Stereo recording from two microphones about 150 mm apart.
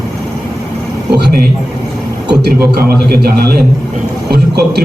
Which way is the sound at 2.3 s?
90° right.